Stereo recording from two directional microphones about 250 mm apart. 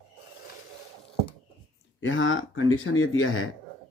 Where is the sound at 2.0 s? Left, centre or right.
Left.